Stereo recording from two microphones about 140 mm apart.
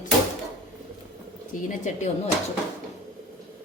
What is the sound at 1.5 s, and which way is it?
Speech, 65° left (ahead or behind).